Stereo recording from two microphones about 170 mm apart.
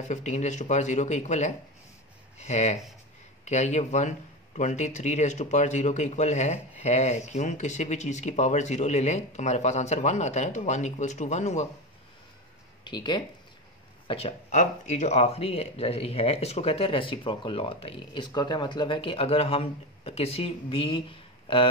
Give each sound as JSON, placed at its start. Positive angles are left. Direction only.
{"t": 0.1, "sound": "speech", "side_deg": 40}
{"t": 12.8, "sound": "speech", "side_deg": 25}